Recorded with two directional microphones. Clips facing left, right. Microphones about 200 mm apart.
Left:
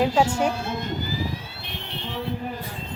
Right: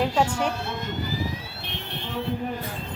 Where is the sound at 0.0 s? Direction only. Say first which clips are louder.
Left 3 dB; 10° left (ahead or behind).